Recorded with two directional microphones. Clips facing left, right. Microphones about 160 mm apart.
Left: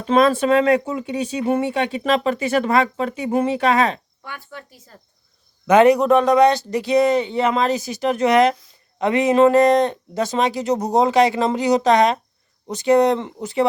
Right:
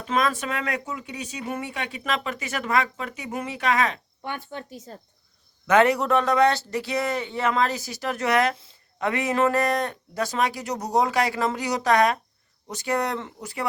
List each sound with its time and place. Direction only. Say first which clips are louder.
0.0 s speech: left 9 dB; 30° left (ahead or behind)
4.2 s speech: right 3 dB; 20° right (ahead or behind)
5.6 s speech: left 6 dB; 15° left (ahead or behind)